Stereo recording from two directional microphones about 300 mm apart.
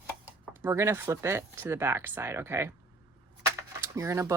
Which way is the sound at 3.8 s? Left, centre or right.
Centre.